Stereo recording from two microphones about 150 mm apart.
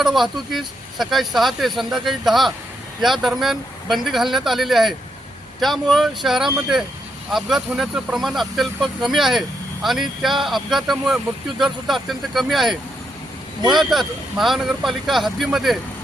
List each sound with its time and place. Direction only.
0.0 s speech: centre (ahead or behind)